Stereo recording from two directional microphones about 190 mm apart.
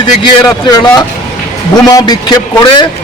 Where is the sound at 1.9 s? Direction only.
20° left (ahead or behind).